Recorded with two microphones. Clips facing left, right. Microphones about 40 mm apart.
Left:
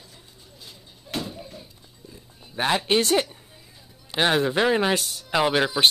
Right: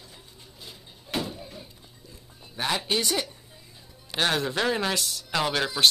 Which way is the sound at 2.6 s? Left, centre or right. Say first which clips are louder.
Left 5 dB; left.